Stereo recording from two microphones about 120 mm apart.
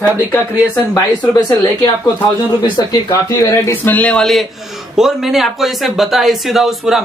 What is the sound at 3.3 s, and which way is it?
Speech, 25° left (ahead or behind).